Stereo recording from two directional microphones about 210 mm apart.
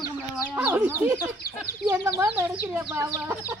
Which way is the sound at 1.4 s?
45° left (ahead or behind).